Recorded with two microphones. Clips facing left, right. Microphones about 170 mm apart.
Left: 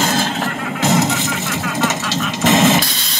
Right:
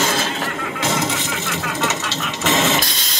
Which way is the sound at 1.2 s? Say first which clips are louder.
Left 3 dB; 45° left (ahead or behind).